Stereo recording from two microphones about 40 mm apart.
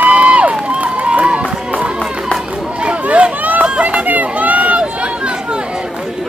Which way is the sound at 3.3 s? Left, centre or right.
Right.